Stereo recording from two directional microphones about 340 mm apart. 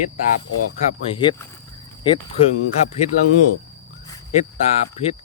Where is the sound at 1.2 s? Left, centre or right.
Centre.